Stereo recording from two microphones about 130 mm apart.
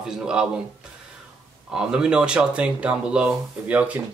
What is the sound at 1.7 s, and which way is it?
Speech, 5° right (ahead or behind).